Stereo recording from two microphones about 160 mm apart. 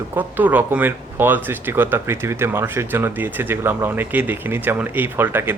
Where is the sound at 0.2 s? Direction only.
10° right (ahead or behind).